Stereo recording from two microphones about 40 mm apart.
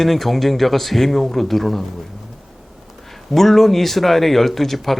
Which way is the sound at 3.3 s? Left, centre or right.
Centre.